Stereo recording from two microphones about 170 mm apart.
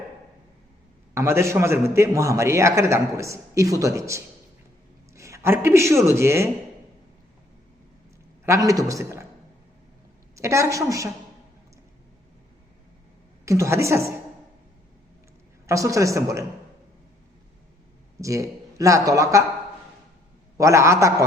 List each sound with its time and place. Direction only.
1.1 s a man's voice: 15° right (ahead or behind)
8.4 s a woman's voice: 20° right (ahead or behind)
10.3 s a woman's voice: 15° right (ahead or behind)
13.4 s a man's voice: 15° right (ahead or behind)
15.6 s a woman's voice: 20° right (ahead or behind)
18.2 s a man's voice: 20° right (ahead or behind)
20.6 s a man's voice: 15° right (ahead or behind)